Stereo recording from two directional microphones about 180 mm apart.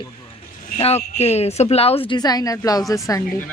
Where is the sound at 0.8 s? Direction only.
35° left (ahead or behind).